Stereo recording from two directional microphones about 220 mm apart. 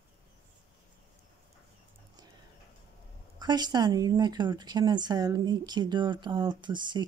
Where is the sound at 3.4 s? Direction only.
20° right (ahead or behind).